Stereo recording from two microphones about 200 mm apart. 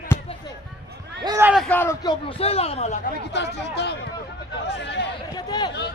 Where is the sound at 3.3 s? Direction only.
60° left (ahead or behind).